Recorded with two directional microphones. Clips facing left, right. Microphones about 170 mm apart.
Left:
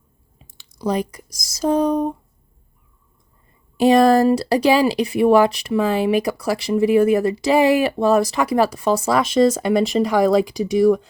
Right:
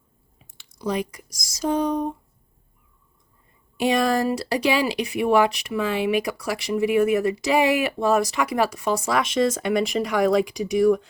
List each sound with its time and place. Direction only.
0.3 s a sound: 35° left (ahead or behind)
1.5 s speech: 35° left (ahead or behind)
3.8 s speech: 35° left (ahead or behind)